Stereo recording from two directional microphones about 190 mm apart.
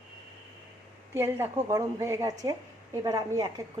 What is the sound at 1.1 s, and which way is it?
A woman's voice, 15° right (ahead or behind).